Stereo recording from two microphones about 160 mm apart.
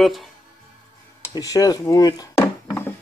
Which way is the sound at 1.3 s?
20° left (ahead or behind).